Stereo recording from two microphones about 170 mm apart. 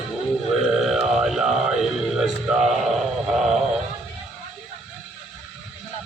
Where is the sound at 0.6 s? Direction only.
Centre (ahead or behind).